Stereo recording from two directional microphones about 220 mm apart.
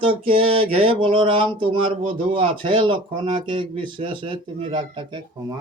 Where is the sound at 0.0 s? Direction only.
25° right (ahead or behind).